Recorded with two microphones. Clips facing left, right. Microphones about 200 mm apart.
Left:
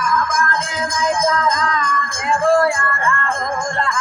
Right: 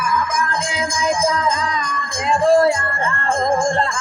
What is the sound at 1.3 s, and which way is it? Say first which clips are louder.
Music: left 1 dB; 10° right (ahead or behind).